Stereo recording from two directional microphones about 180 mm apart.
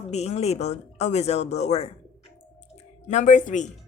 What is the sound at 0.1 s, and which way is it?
Speech, 35° left (ahead or behind).